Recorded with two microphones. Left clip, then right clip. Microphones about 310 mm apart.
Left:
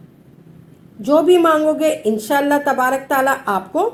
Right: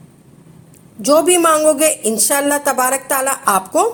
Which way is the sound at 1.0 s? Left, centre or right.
Right.